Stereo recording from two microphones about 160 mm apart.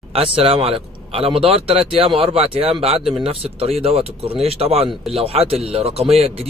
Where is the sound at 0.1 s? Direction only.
35° right (ahead or behind).